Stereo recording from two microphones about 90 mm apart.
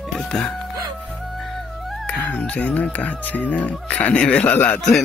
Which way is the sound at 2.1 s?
15° left (ahead or behind).